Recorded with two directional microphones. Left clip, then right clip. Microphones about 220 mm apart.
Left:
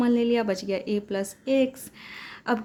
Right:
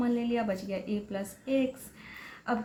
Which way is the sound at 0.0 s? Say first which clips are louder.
Left 7 dB; 50° left (ahead or behind).